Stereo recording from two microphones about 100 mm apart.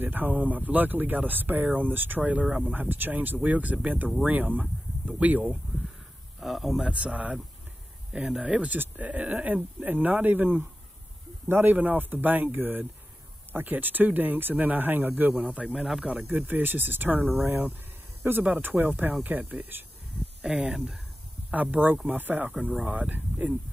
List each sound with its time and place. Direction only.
0.0 s speech: 15° right (ahead or behind)
6.4 s speech: centre (ahead or behind)
16.1 s speech: 15° right (ahead or behind)